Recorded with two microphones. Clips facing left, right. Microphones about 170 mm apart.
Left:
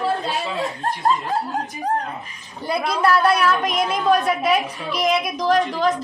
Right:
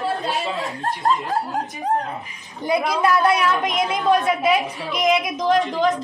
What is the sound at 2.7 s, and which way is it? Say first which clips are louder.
A woman's voice: even; 15° right (ahead or behind).